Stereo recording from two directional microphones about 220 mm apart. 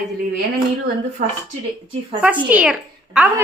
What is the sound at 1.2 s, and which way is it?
Speech, 35° right (ahead or behind).